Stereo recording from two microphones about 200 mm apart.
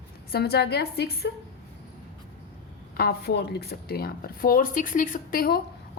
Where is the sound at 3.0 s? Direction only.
55° left (ahead or behind).